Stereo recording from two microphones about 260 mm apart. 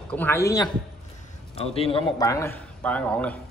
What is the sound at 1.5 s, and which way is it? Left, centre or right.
A man's voice, left.